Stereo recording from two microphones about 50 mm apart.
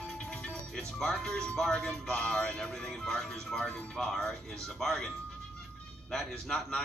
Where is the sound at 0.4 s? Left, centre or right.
Centre.